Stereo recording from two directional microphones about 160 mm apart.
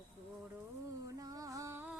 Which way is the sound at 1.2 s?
20° right (ahead or behind).